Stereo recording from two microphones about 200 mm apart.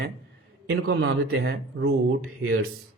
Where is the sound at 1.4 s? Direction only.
50° right (ahead or behind).